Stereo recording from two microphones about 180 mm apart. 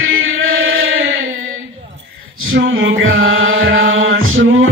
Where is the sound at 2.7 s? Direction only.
90° right.